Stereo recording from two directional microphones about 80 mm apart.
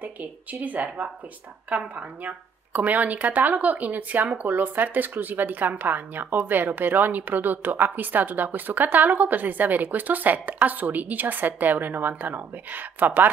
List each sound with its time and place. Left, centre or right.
0.0 s speech: centre